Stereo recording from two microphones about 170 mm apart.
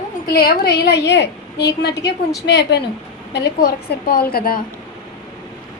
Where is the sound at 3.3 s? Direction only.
75° left (ahead or behind); by 4.6 s 60° left (ahead or behind).